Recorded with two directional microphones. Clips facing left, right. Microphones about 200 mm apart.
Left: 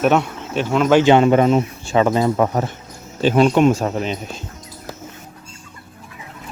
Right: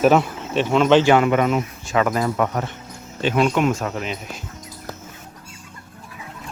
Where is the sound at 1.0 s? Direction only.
25° left (ahead or behind).